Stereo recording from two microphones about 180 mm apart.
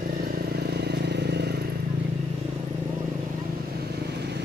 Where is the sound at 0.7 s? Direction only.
65° right (ahead or behind).